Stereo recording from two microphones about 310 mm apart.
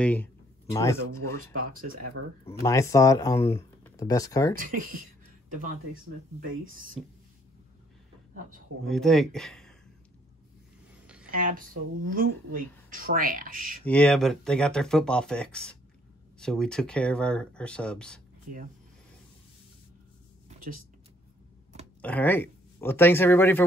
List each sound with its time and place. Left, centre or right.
0.0 s speech: centre
1.3 s speech: right
2.0 s speech: right
2.4 s speech: centre
4.6 s speech: right
6.7 s speech: right
8.8 s speech: centre
11.2 s speech: right
13.8 s speech: centre
18.5 s speech: right
22.0 s speech: centre